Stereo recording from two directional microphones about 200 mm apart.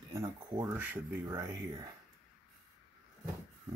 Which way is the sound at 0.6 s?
10° right (ahead or behind).